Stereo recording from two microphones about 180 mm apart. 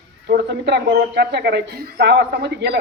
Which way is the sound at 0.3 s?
65° right (ahead or behind).